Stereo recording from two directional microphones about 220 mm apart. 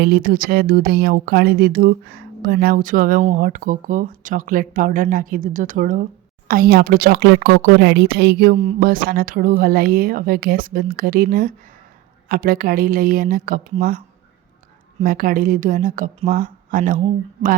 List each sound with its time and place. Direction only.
0.0 s speech: 40° right (ahead or behind)
15.0 s speech: 40° right (ahead or behind)